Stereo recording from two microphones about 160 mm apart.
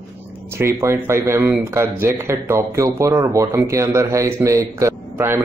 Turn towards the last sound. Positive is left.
turn(degrees=-15)  # may be behind; listen again after turning